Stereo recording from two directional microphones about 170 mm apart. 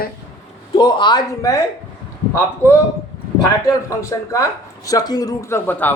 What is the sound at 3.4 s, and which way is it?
A man's voice, 20° left (ahead or behind).